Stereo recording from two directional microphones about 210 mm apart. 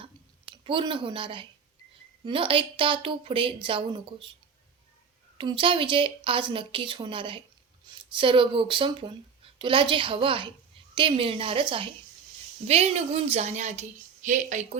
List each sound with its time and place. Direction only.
0.0 s a sound: 25° right (ahead or behind)
2.2 s speech: 25° right (ahead or behind)
5.4 s a woman's voice: 25° right (ahead or behind)